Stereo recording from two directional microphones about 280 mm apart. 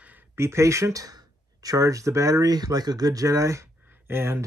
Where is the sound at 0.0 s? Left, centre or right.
Centre.